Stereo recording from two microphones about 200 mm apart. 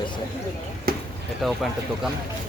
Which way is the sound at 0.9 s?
50° right (ahead or behind).